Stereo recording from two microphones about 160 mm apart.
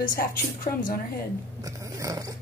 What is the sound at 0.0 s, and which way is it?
Speech, 60° left (ahead or behind).